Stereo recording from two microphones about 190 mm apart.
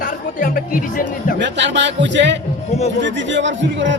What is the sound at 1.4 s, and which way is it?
A man's voice, 70° right (ahead or behind).